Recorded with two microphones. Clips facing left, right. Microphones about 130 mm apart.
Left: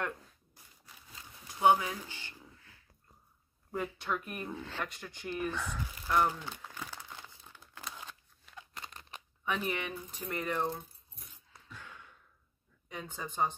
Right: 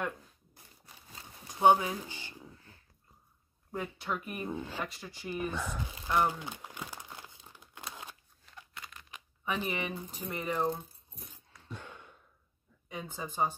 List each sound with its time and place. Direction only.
0.8 s a sound: 30° right (ahead or behind); by 2.5 s 15° right (ahead or behind)
2.5 s a sound: 35° right (ahead or behind)
3.7 s speech: centre (ahead or behind)
4.5 s speech: 15° right (ahead or behind)
5.6 s speech: 25° right (ahead or behind)
6.1 s crumpling: 10° right (ahead or behind)
8.7 s crunch: 35° left (ahead or behind)
9.4 s speech: 5° right (ahead or behind)
11.6 s a sound: 30° right (ahead or behind)
12.8 s speech: 5° right (ahead or behind)